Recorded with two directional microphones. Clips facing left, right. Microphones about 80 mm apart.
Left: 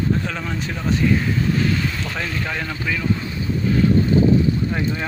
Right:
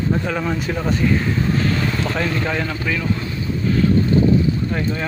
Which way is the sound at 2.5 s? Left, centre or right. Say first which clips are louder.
Right 3 dB; centre.